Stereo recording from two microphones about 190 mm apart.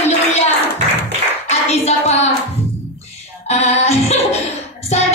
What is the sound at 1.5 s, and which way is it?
Clapping, 35° left (ahead or behind).